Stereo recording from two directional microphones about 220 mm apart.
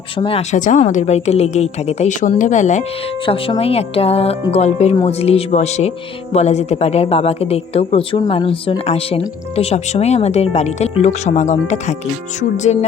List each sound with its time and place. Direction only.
0.2 s a woman's voice: 25° left (ahead or behind)